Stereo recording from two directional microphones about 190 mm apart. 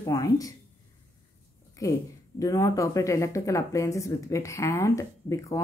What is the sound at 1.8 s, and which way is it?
Speech, 15° left (ahead or behind).